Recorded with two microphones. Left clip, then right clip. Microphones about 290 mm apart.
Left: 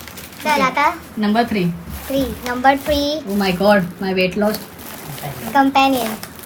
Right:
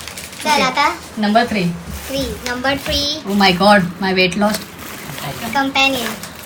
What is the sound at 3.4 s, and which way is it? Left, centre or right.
Speech, right.